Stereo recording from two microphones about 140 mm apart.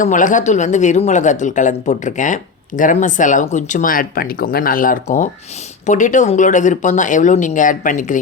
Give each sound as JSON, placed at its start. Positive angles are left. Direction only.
{"t": 0.0, "sound": "a woman's voice", "side_deg": 65}
{"t": 5.0, "sound": "a woman's voice", "side_deg": 65}